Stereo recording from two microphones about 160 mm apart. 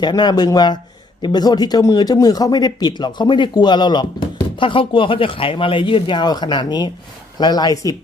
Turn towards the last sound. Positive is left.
turn(degrees=20)  # may be behind; listen again after turning